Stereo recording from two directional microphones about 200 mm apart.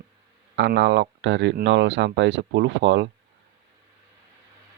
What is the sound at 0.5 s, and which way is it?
Speech, 65° right (ahead or behind).